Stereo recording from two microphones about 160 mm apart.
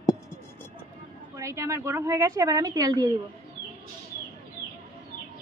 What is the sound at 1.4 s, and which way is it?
A woman's voice, 15° right (ahead or behind).